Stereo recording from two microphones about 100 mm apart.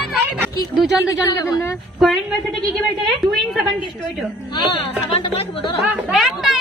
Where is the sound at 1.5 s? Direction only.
30° left (ahead or behind).